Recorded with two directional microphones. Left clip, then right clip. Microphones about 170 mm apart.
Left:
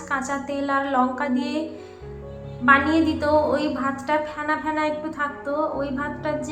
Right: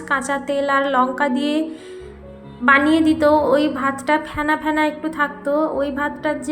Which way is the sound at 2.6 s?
30° right (ahead or behind).